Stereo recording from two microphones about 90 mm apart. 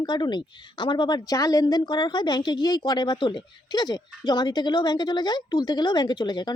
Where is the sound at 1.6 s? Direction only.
60° left (ahead or behind).